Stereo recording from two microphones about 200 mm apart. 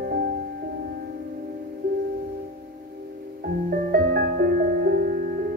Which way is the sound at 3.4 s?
50° right (ahead or behind).